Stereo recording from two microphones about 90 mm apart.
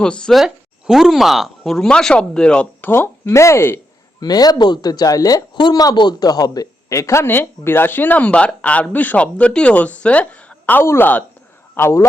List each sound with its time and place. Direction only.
0.0 s speech: 10° left (ahead or behind)
0.4 s speech: 5° right (ahead or behind); by 2.9 s 10° left (ahead or behind)
2.9 s speech: 25° left (ahead or behind)
4.2 s speech: 45° left (ahead or behind); by 12.0 s 30° left (ahead or behind)